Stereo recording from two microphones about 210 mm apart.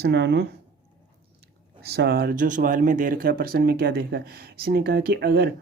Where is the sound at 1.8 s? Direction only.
50° right (ahead or behind).